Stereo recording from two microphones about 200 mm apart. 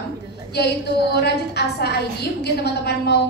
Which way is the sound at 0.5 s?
55° left (ahead or behind).